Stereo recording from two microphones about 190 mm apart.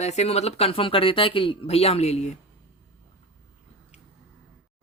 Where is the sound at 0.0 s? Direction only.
35° left (ahead or behind).